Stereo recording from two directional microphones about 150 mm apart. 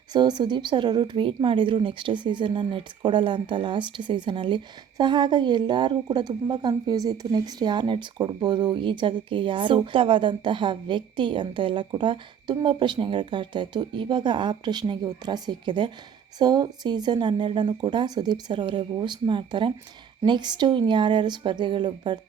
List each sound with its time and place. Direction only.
0.1 s a woman's voice: 30° right (ahead or behind)